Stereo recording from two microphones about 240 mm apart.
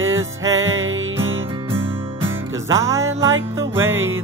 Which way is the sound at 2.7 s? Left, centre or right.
Centre.